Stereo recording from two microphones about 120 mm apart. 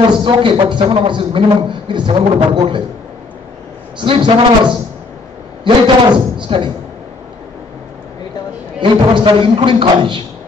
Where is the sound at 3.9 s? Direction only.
45° right (ahead or behind).